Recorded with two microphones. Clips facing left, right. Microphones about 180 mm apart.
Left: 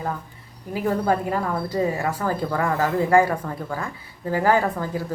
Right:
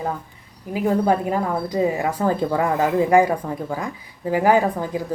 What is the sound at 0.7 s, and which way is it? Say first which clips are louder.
Speech: right 3 dB; 15° right (ahead or behind).